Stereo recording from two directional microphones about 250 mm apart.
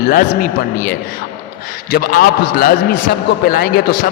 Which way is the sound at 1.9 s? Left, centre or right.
Left.